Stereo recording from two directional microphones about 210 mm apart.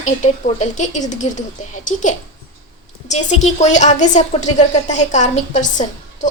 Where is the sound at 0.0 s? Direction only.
35° left (ahead or behind).